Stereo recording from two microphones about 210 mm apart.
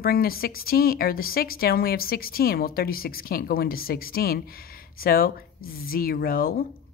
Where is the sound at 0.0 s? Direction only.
45° left (ahead or behind).